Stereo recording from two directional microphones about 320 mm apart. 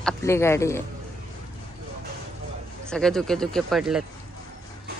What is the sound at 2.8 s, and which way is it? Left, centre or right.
Speech, centre.